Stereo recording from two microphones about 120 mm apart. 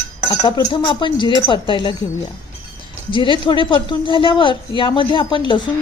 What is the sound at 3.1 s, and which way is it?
A woman's voice, 45° left (ahead or behind).